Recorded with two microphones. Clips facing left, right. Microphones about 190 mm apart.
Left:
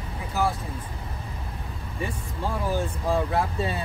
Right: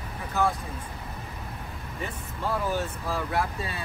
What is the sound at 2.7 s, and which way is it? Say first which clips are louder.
Speech: left 5 dB; 15° left (ahead or behind).